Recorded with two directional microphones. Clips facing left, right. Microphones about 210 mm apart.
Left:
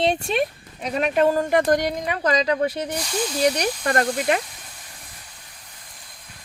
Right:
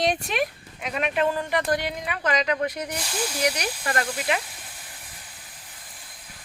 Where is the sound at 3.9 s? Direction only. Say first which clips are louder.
Left 5 dB; 50° left (ahead or behind).